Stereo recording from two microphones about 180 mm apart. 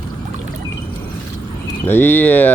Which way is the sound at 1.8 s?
10° left (ahead or behind).